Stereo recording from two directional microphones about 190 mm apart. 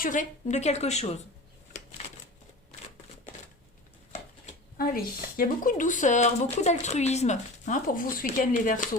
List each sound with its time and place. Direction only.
0.0 s speech: 45° left (ahead or behind)
4.1 s a sound: 35° left (ahead or behind)
5.4 s speech: 45° left (ahead or behind)